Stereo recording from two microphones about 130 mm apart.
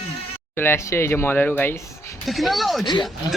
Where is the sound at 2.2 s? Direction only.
Centre (ahead or behind).